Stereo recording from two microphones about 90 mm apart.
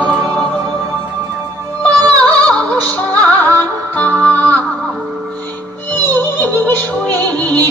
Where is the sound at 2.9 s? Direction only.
15° left (ahead or behind).